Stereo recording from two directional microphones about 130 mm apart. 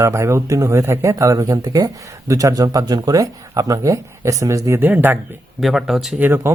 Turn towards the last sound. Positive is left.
turn(degrees=-15)  # may be behind; listen again after turning